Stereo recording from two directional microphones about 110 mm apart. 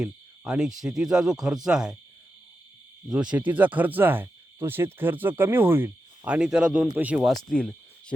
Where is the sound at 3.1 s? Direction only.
10° right (ahead or behind).